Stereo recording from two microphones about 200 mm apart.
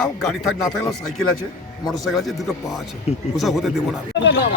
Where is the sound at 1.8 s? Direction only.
Centre (ahead or behind).